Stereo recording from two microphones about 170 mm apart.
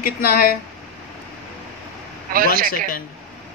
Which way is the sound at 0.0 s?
60° left (ahead or behind).